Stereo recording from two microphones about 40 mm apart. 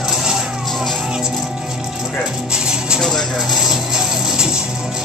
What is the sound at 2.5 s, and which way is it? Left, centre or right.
Music, centre.